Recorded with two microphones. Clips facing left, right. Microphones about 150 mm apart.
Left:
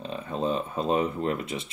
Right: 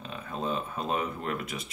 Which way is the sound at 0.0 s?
30° left (ahead or behind).